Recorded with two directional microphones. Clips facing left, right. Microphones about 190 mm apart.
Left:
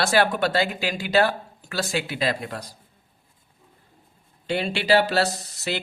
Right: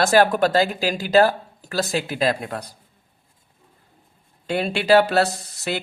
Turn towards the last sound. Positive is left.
turn(degrees=-50)  # may be behind; listen again after turning